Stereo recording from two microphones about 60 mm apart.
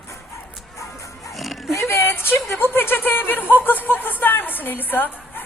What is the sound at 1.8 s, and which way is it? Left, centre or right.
A woman's voice, left.